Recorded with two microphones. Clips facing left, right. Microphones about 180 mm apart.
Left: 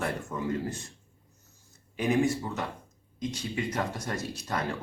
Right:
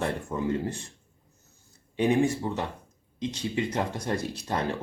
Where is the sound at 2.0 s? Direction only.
30° right (ahead or behind).